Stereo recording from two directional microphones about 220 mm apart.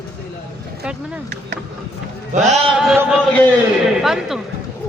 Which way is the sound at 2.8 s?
5° right (ahead or behind).